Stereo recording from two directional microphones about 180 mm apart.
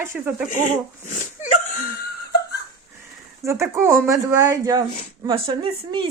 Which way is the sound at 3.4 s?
15° right (ahead or behind).